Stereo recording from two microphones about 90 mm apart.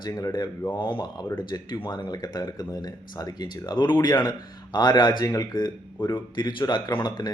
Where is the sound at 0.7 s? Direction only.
60° left (ahead or behind).